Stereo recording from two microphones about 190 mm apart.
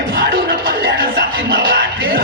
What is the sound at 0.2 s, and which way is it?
Music, 50° right (ahead or behind).